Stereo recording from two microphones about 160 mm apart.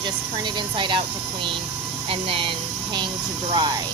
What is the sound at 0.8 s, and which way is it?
Speech, 30° right (ahead or behind).